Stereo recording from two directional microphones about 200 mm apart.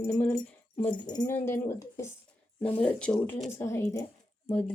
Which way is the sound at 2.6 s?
5° left (ahead or behind).